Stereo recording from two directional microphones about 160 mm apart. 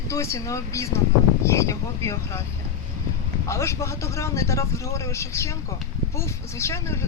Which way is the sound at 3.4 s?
20° left (ahead or behind).